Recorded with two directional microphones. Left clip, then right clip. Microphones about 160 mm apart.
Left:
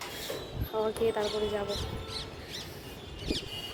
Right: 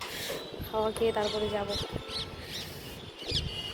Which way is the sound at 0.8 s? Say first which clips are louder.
Right 1 dB; 15° left (ahead or behind).